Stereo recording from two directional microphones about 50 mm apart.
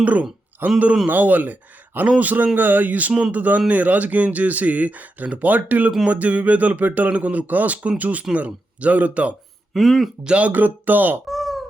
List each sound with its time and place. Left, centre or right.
0.0 s speech: right
0.6 s speech: right
9.7 s speech: centre
10.2 s speech: right
10.5 s speech: right
11.3 s a sound: centre